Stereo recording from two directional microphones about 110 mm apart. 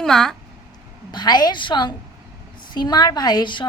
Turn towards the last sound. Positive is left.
turn(degrees=45)  # may be behind; listen again after turning